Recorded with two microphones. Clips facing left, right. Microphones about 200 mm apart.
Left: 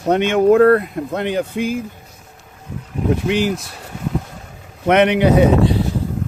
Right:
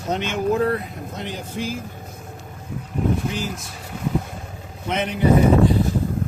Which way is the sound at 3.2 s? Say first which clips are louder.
Left 9 dB; 75° left (ahead or behind).